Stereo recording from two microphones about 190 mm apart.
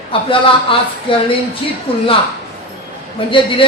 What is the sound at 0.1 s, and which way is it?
Speech, 25° left (ahead or behind).